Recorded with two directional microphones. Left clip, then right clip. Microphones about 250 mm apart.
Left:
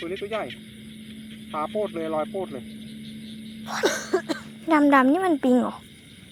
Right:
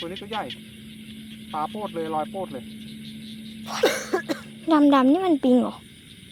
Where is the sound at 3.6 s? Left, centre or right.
Centre.